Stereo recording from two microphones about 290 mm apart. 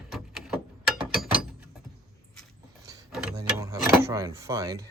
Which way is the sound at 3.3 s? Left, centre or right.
Centre.